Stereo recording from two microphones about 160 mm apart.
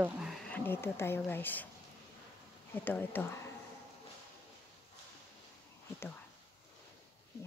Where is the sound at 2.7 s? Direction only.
10° left (ahead or behind).